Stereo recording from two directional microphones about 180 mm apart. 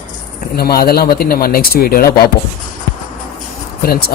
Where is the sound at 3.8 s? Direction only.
60° left (ahead or behind).